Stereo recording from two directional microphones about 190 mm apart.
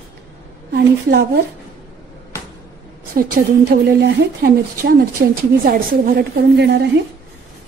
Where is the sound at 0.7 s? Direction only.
60° right (ahead or behind).